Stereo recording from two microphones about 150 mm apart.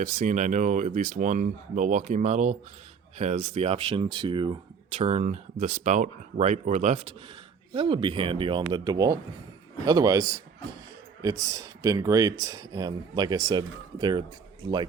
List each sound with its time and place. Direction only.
0.0 s speech: 55° right (ahead or behind)
7.7 s speech: 35° right (ahead or behind)